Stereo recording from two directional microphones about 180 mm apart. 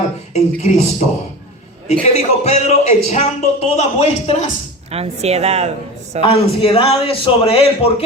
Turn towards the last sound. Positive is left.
turn(degrees=30)  # may be behind; listen again after turning